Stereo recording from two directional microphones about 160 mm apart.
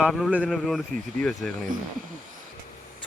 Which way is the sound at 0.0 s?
5° right (ahead or behind).